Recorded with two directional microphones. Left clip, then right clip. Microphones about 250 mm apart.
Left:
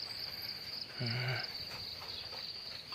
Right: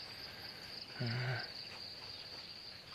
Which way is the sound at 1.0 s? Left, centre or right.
Centre.